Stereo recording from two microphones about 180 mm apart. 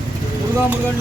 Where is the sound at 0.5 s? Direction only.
10° right (ahead or behind).